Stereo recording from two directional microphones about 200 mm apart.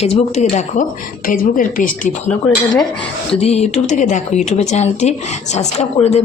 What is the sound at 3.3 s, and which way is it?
Speech, 30° left (ahead or behind).